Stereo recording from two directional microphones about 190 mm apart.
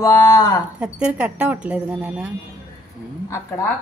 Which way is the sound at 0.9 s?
5° right (ahead or behind).